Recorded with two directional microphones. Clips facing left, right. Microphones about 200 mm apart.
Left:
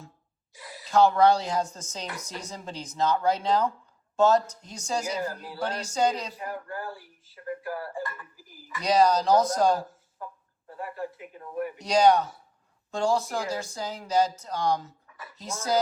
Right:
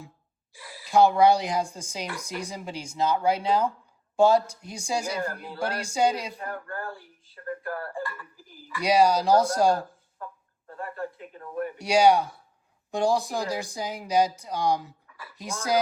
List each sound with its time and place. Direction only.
0.5 s owl: 20° left (ahead or behind)
0.9 s speech: 15° right (ahead or behind)
6.3 s speech: 5° left (ahead or behind)
8.0 s a woman's voice: 20° left (ahead or behind)
8.8 s speech: 10° right (ahead or behind)
10.2 s a sound: 10° left (ahead or behind)
10.7 s speech: 5° left (ahead or behind)
11.8 s speech: 10° right (ahead or behind)
15.0 s a sound: 25° left (ahead or behind)